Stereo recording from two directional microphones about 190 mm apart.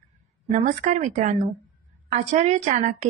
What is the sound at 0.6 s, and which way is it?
A woman's voice, 40° right (ahead or behind).